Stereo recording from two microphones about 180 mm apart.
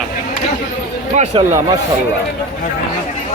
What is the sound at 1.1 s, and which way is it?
Speech, 40° right (ahead or behind).